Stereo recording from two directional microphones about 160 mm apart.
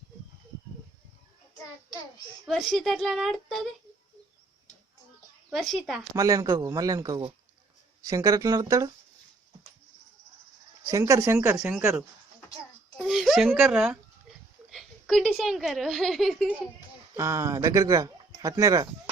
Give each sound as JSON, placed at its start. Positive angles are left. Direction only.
{"t": 2.5, "sound": "a woman's voice", "side_deg": 0}
{"t": 5.5, "sound": "a woman's voice", "side_deg": 0}
{"t": 6.1, "sound": "speech", "side_deg": -20}
{"t": 10.8, "sound": "speech", "side_deg": -20}
{"t": 11.5, "sound": "a woman's voice", "side_deg": -5}
{"t": 17.2, "sound": "speech", "side_deg": -20}